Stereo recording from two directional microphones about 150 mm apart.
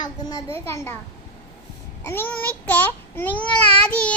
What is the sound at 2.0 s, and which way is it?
A child's voice, 15° left (ahead or behind).